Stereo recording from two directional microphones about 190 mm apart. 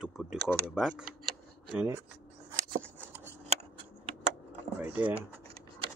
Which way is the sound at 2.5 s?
10° right (ahead or behind).